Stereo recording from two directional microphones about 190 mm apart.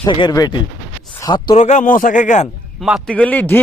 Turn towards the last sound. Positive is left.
turn(degrees=10)  # may be behind; listen again after turning